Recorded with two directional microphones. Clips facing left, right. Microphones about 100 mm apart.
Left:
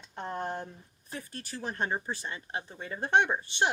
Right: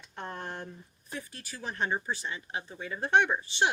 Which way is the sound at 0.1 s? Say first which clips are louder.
Left 4 dB; 20° left (ahead or behind).